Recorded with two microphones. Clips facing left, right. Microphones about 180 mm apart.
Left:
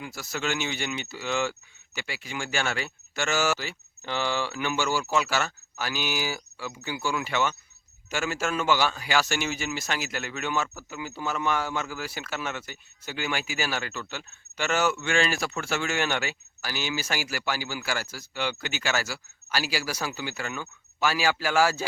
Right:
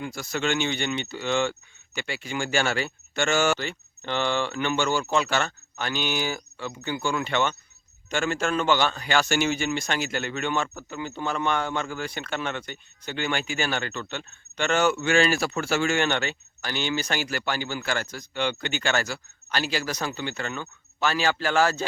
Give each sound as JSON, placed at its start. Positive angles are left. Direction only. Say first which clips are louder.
{"t": 0.0, "sound": "speech", "louder": "right 4 dB", "side_deg": 5}
{"t": 14.9, "sound": "speech", "louder": "right 4 dB", "side_deg": -40}
{"t": 15.9, "sound": "speech", "louder": "right 3 dB", "side_deg": 5}